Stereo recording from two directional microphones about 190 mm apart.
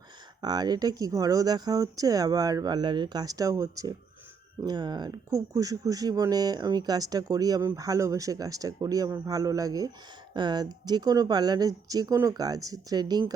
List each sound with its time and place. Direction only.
0.4 s speech: 20° right (ahead or behind)